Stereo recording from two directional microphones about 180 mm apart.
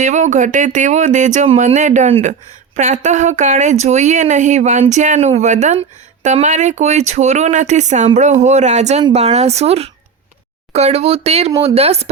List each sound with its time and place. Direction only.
0.0 s speech: 45° right (ahead or behind)